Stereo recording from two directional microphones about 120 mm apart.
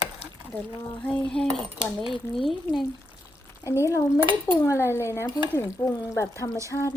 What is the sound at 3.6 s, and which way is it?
Speech, 25° left (ahead or behind).